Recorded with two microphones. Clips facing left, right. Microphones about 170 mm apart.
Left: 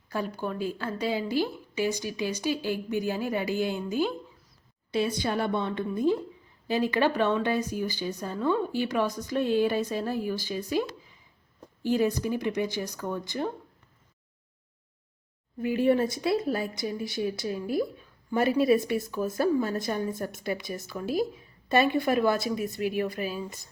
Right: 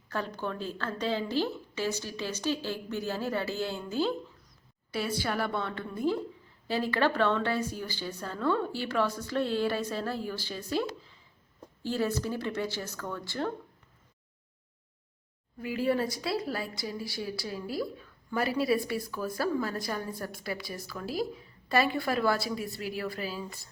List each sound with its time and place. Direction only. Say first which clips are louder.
0.1 s a woman's voice: left 3 dB; 10° left (ahead or behind)
15.5 s a woman's voice: left 5 dB; 25° left (ahead or behind)